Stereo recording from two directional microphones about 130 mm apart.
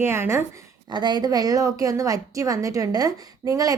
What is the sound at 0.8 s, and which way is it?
Speech, 35° right (ahead or behind).